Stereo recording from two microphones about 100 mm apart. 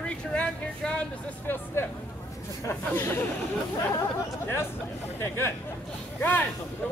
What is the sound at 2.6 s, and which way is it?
Speech, 25° left (ahead or behind).